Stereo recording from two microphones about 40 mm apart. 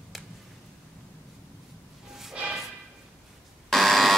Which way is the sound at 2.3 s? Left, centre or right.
Right.